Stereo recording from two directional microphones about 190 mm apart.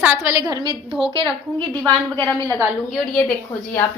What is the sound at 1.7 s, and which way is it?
A woman's voice, 10° left (ahead or behind).